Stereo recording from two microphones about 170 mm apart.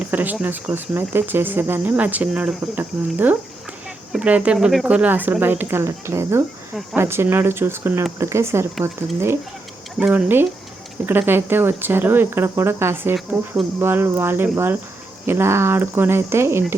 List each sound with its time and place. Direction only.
0.0 s speech: 10° right (ahead or behind)